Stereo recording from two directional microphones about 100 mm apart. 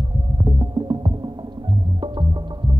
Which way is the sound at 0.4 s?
45° right (ahead or behind).